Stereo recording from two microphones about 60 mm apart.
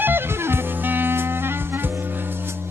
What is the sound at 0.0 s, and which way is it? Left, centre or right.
Music, right.